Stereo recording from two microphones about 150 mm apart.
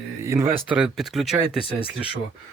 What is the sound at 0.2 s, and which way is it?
Speech, 15° right (ahead or behind).